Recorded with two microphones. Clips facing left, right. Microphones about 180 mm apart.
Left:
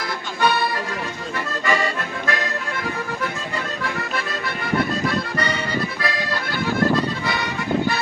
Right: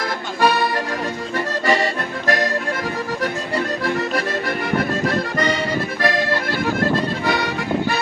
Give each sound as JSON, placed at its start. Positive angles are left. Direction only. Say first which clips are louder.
{"t": 0.4, "sound": "music", "louder": "right 3 dB", "side_deg": -45}
{"t": 2.2, "sound": "accordion", "louder": "right 6 dB", "side_deg": -40}
{"t": 3.8, "sound": "accordion", "louder": "right 6 dB", "side_deg": -40}
{"t": 7.3, "sound": "music", "louder": "right 5 dB", "side_deg": -50}